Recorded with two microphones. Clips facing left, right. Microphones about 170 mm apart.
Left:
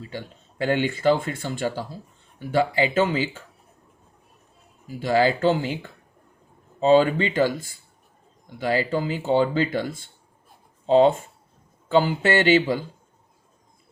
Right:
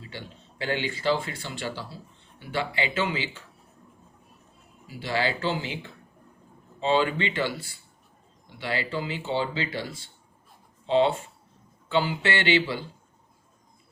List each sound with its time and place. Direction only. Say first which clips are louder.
0.1 s speech: left 6 dB; 45° left (ahead or behind)
4.9 s speech: left 8 dB; 45° left (ahead or behind)
6.7 s speech: left 7 dB; 40° left (ahead or behind)